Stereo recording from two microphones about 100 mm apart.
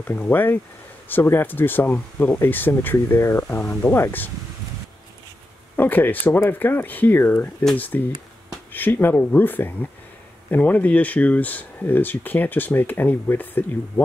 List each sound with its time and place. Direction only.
0.0 s speech: 20° left (ahead or behind)
5.8 s speech: 20° left (ahead or behind)